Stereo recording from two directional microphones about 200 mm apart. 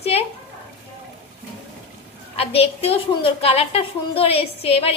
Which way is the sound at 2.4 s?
30° left (ahead or behind).